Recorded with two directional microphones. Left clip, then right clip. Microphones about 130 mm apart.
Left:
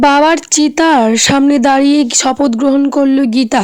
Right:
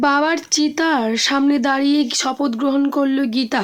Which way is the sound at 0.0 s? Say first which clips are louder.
Left 8 dB; 80° left.